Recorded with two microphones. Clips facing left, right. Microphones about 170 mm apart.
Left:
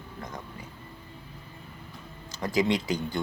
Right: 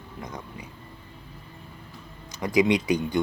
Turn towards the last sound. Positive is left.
turn(degrees=-20)  # may be behind; listen again after turning